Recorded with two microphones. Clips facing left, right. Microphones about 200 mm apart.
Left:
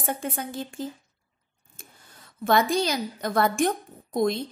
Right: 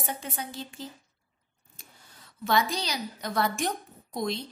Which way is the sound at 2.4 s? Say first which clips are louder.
Left 5 dB; 50° left (ahead or behind).